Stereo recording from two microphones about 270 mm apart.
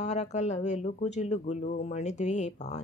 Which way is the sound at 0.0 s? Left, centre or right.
Left.